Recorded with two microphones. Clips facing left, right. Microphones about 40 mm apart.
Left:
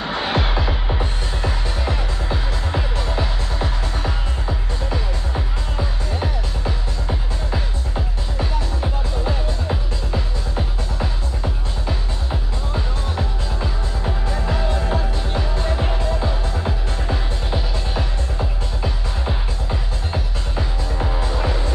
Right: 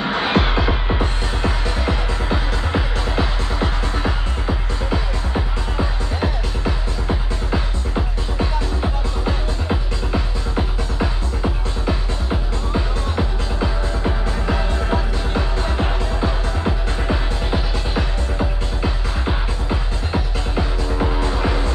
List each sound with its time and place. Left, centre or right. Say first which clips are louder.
0.0 s music: right 3 dB; right